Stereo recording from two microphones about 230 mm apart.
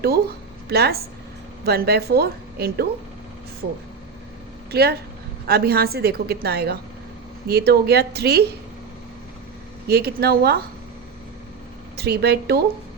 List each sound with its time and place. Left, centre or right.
0.7 s a woman's voice: right
4.7 s a woman's voice: right
9.8 s a woman's voice: right
11.9 s a woman's voice: right